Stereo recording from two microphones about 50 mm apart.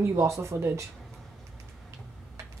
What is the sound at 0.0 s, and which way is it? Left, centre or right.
Speech, right.